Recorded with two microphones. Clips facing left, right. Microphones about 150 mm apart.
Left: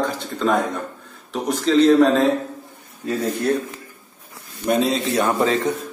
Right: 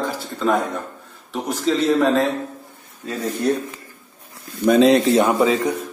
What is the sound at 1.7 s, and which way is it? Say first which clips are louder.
Speech: left 4 dB; 5° right (ahead or behind).